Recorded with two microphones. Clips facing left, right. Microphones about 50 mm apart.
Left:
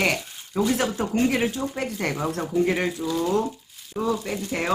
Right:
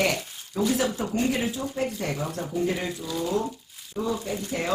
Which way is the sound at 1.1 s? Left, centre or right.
Left.